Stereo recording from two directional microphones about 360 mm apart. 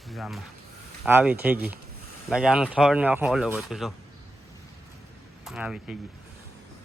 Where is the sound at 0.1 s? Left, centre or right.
Centre.